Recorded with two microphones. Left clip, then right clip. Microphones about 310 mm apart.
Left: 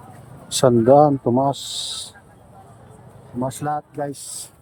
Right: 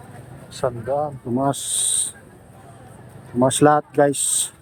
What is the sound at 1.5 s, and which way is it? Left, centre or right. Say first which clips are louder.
Speech: even; left.